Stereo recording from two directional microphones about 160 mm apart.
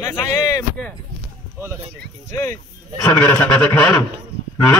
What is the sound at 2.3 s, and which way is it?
A man's voice, 20° left (ahead or behind).